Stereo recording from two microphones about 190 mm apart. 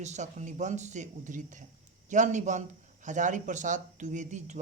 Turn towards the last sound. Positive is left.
turn(degrees=-40)  # may be behind; listen again after turning